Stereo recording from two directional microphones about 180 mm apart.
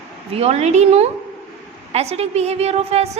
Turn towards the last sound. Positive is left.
turn(degrees=-35)  # may be behind; listen again after turning